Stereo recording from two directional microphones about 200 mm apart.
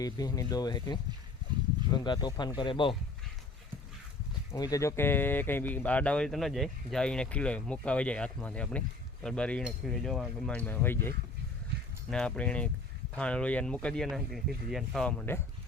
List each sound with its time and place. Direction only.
0.0 s speech: 20° left (ahead or behind)
4.5 s speech: 20° left (ahead or behind)
12.1 s speech: 5° left (ahead or behind)